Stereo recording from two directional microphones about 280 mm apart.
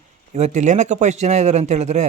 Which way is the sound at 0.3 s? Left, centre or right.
Right.